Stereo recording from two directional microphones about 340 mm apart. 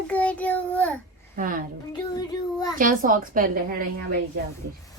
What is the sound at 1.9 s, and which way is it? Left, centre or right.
Child singing, centre.